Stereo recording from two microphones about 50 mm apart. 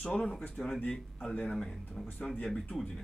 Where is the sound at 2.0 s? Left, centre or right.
Centre.